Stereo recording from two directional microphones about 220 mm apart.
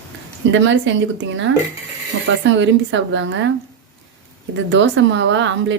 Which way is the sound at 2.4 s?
55° right (ahead or behind).